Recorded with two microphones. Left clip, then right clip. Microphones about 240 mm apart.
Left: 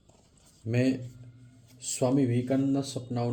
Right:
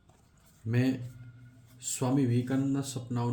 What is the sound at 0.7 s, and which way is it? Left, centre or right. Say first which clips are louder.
A man's voice: left 3 dB; centre.